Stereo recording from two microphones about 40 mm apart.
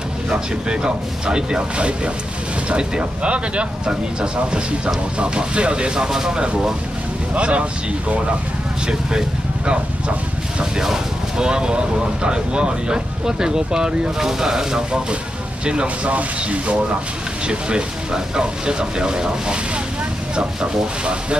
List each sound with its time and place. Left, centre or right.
0.3 s speech: right
7.3 s speech: right
10.6 s speech: centre
16.1 s speech: right